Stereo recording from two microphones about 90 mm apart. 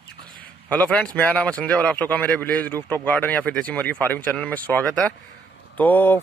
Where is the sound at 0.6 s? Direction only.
15° left (ahead or behind).